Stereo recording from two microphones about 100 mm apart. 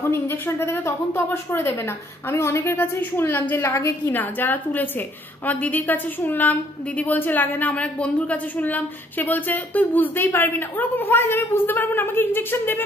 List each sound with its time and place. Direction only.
0.1 s a woman's voice: 25° left (ahead or behind)